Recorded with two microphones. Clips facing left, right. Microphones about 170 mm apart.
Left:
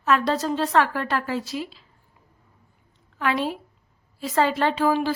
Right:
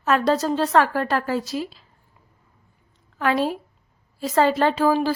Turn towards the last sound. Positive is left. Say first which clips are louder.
# right 2 dB
turn(degrees=-40)  # may be behind; listen again after turning